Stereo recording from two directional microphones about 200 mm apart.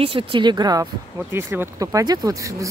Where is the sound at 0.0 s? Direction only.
25° right (ahead or behind).